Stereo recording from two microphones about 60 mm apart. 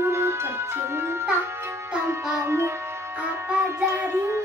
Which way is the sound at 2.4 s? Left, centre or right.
Right.